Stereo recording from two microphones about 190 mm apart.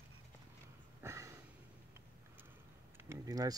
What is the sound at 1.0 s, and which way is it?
Sniff, 15° right (ahead or behind).